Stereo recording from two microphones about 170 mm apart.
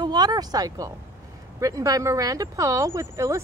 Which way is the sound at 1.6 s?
20° right (ahead or behind).